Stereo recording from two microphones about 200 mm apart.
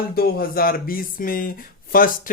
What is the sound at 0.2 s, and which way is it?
Speech, 50° left (ahead or behind).